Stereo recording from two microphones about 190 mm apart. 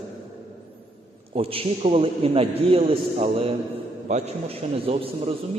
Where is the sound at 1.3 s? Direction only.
30° right (ahead or behind).